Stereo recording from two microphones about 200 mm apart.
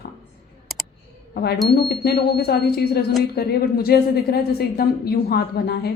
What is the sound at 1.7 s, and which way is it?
A woman's voice, 50° left (ahead or behind).